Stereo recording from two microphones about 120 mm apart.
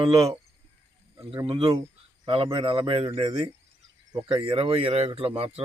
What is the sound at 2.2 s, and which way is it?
Speech, 45° right (ahead or behind).